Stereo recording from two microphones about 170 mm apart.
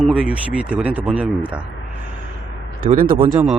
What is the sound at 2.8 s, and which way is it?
Speech, 30° right (ahead or behind).